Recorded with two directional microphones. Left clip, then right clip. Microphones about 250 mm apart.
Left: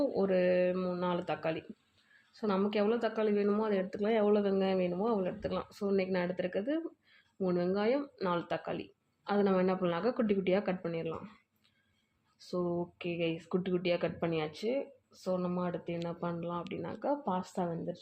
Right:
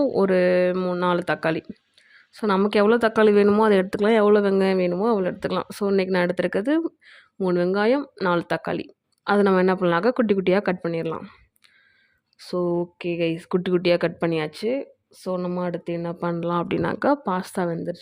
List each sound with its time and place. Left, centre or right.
0.0 s speech: right
12.4 s speech: right